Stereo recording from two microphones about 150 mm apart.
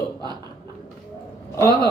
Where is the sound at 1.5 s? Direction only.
20° left (ahead or behind).